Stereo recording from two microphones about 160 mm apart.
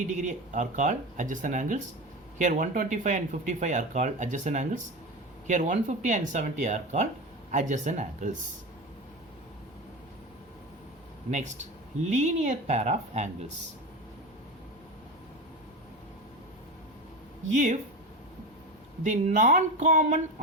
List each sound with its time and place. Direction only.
0.1 s speech: 50° right (ahead or behind)
11.3 s speech: 50° right (ahead or behind)
17.5 s speech: 50° right (ahead or behind)
19.1 s speech: 50° right (ahead or behind)